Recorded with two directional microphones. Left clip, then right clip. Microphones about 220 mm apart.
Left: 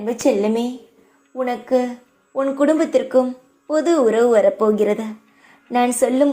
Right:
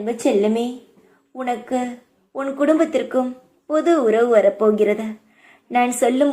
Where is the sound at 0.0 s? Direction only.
10° left (ahead or behind).